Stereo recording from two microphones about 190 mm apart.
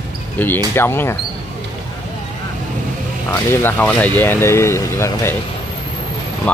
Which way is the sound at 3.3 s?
10° left (ahead or behind).